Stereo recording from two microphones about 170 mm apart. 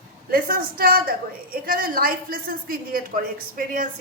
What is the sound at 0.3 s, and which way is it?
A woman's voice, 60° right (ahead or behind).